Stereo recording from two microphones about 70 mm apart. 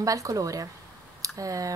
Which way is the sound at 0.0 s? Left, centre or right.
Right.